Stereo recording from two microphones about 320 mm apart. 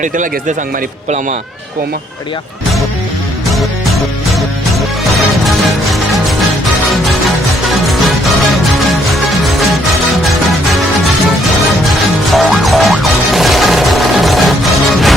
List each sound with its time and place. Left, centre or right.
0.0 s speech: right
5.9 s music: centre
12.3 s music: centre